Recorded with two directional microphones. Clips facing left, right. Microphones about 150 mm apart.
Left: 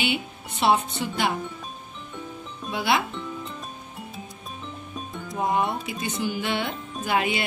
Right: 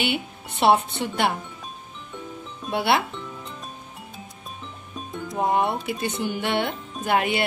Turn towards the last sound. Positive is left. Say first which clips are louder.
# right 2 dB
turn(degrees=-55)  # may be behind; listen again after turning